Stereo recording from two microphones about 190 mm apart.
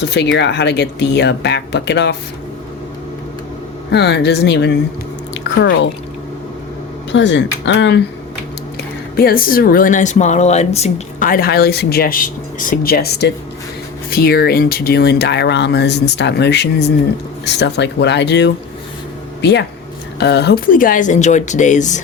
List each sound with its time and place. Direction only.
0.0 s speech: 65° left (ahead or behind)
3.9 s speech: 60° left (ahead or behind)
7.1 s speech: 70° left (ahead or behind)
9.1 s a woman's voice: 50° left (ahead or behind)